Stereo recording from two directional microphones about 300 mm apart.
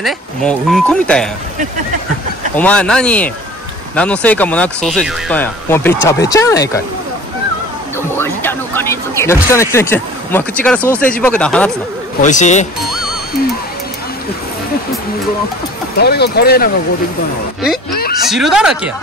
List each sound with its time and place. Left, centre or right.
0.0 s speech: centre
2.5 s speech: centre
8.2 s speech: centre
12.2 s speech: left
16.0 s speech: left
18.2 s speech: centre